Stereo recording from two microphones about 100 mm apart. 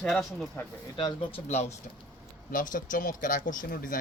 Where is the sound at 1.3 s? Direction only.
90° left.